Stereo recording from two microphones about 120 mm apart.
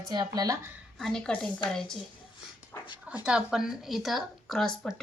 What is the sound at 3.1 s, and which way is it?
Speech, 5° right (ahead or behind).